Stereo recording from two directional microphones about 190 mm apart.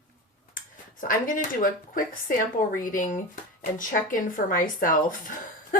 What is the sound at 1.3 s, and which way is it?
A woman's voice, 45° left (ahead or behind).